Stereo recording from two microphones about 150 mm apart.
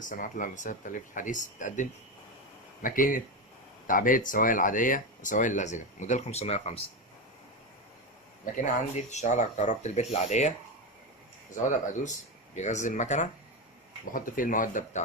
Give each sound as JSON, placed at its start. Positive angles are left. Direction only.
{"t": 0.0, "sound": "speech", "side_deg": 60}
{"t": 8.5, "sound": "speech", "side_deg": 50}
{"t": 12.5, "sound": "speech", "side_deg": 50}
{"t": 14.1, "sound": "speech", "side_deg": 65}